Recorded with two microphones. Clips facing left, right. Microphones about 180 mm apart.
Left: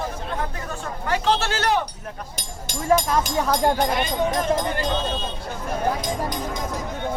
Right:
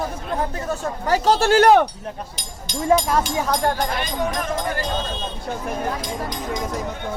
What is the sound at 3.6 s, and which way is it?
Speech, 15° left (ahead or behind).